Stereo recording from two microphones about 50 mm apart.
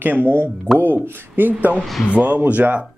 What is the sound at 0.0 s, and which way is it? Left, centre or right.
Speech, right.